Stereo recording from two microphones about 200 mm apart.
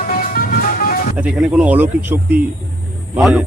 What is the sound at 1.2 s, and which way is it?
A man's voice, 5° right (ahead or behind).